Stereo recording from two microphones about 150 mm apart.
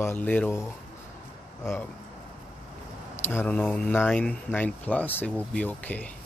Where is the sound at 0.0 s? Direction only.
10° left (ahead or behind).